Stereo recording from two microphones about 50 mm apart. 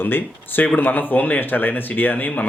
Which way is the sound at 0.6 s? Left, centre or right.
Left.